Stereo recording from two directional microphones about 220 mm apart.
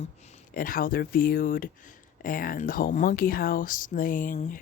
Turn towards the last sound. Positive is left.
turn(degrees=35)  # may be behind; listen again after turning